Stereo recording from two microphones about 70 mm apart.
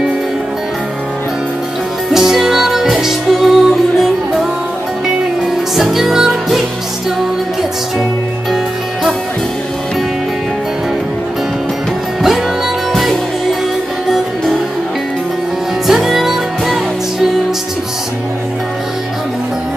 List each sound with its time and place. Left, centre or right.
2.0 s music: centre
5.8 s music: centre
12.9 s music: centre
15.9 s music: centre